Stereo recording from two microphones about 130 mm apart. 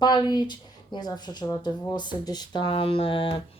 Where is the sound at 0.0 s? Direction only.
35° left (ahead or behind).